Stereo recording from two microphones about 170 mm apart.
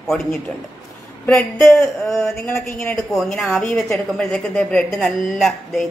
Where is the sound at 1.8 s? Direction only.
15° left (ahead or behind).